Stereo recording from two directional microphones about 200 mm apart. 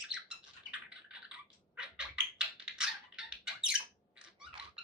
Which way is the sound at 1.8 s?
5° right (ahead or behind).